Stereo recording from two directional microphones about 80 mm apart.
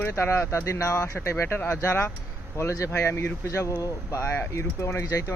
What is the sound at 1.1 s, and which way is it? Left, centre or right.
Speech, left.